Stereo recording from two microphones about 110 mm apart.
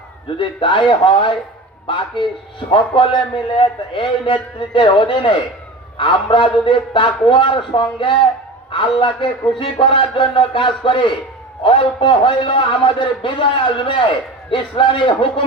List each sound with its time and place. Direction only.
0.3 s a man's voice: 50° left (ahead or behind)